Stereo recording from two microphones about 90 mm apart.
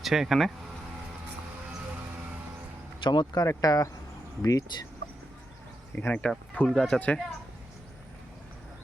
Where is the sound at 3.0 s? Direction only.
55° left (ahead or behind).